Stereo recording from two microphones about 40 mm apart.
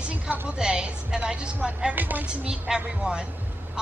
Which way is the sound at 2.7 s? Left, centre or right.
Centre.